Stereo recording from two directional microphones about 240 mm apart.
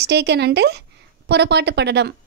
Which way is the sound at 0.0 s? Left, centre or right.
Right.